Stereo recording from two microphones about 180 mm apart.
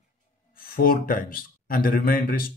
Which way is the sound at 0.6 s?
55° left (ahead or behind).